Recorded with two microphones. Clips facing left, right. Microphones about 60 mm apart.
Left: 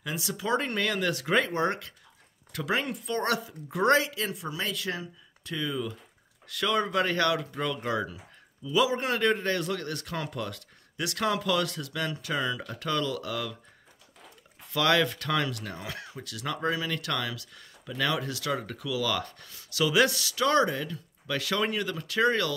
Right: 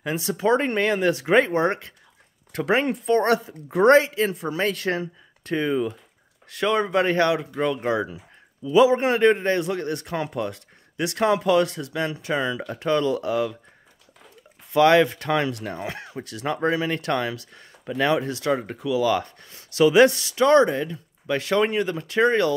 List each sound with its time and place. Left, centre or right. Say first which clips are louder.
0.0 s speech: right 9 dB; right
14.7 s speech: right 8 dB; right